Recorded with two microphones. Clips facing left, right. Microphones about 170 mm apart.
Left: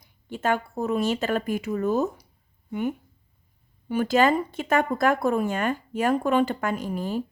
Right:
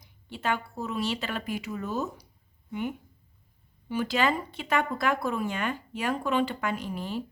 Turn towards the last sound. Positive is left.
turn(degrees=45)  # may be behind; listen again after turning